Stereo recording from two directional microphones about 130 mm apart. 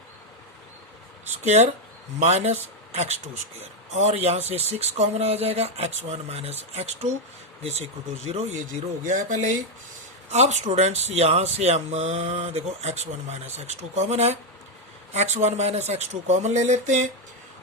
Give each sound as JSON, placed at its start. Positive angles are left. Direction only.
{"t": 2.1, "sound": "speech", "side_deg": -60}
{"t": 9.0, "sound": "speech", "side_deg": -75}
{"t": 10.3, "sound": "speech", "side_deg": -60}